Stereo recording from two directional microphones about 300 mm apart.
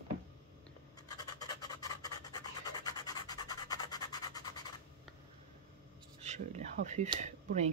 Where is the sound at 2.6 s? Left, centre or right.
Centre.